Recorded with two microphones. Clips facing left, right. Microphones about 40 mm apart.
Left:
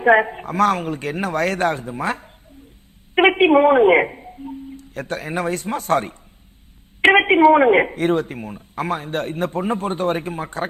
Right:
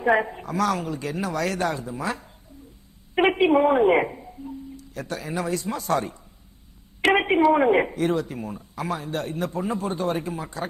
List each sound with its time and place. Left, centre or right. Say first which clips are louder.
0.0 s a woman's voice: left 6 dB; left